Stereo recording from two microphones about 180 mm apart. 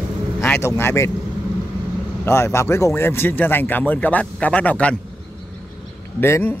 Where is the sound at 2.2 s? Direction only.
15° left (ahead or behind).